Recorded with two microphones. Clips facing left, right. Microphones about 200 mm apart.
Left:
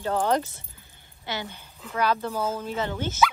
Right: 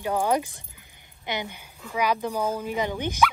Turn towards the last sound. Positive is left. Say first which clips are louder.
# right 1 dB
turn(degrees=-15)  # may be behind; listen again after turning